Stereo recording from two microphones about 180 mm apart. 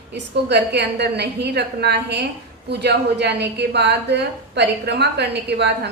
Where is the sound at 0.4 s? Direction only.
70° right (ahead or behind).